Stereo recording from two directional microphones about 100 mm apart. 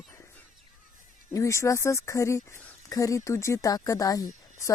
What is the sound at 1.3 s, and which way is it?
Speech, 30° left (ahead or behind).